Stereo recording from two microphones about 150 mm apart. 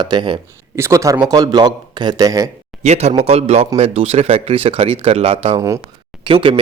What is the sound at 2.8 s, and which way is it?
A man's voice, 45° right (ahead or behind).